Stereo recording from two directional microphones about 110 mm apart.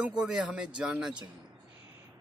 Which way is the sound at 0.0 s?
10° right (ahead or behind).